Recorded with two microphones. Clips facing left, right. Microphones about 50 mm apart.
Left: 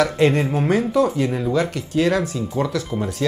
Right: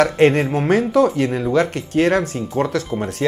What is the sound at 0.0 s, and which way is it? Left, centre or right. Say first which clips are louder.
Speech: right 3 dB; right.